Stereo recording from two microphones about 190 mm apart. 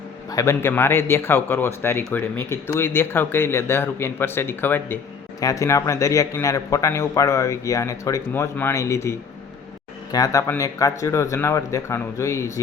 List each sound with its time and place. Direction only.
0.3 s speech: 15° left (ahead or behind)